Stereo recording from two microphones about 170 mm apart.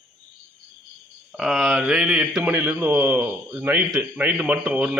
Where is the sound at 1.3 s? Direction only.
Centre (ahead or behind).